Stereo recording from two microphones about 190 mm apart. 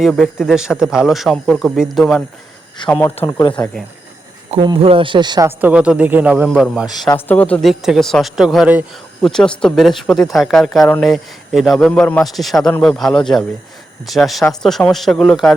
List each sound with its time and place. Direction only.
0.0 s speech: centre (ahead or behind)
2.8 s speech: 25° left (ahead or behind)
4.5 s speech: 25° right (ahead or behind)
5.5 s a man's voice: 10° right (ahead or behind)
7.0 s speech: 15° left (ahead or behind)